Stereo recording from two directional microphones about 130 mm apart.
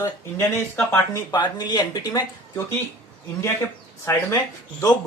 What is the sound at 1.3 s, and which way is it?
Speech, 35° left (ahead or behind).